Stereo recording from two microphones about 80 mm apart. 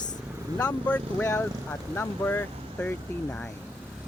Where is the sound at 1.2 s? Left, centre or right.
Left.